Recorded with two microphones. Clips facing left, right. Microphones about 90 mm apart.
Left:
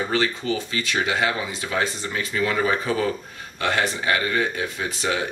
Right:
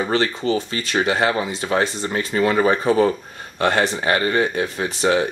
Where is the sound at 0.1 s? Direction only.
35° right (ahead or behind).